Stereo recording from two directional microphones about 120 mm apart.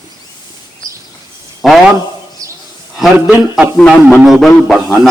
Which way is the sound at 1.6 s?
Centre (ahead or behind).